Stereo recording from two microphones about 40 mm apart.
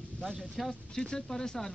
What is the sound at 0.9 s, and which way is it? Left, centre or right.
Speech, centre.